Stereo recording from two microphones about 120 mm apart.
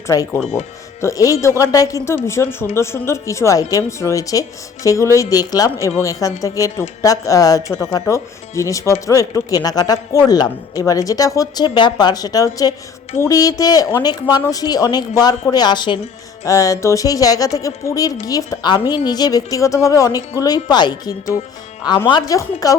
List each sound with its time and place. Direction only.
0.6 s speech: 65° left (ahead or behind)
1.0 s a woman's voice: 30° left (ahead or behind)
16.4 s a woman's voice: 30° left (ahead or behind)